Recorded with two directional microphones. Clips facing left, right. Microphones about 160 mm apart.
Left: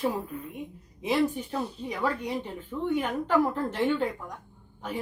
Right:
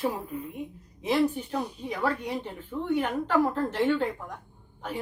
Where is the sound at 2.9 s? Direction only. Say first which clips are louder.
Even; 10° left (ahead or behind).